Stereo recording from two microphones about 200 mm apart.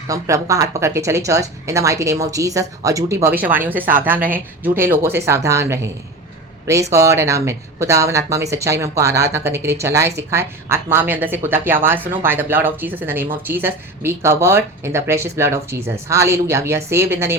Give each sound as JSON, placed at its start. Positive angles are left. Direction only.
{"t": 0.1, "sound": "speech", "side_deg": -15}